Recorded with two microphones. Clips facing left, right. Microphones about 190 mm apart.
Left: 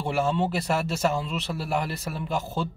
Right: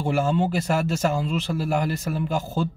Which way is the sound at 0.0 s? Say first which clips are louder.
Right 3 dB; centre (ahead or behind).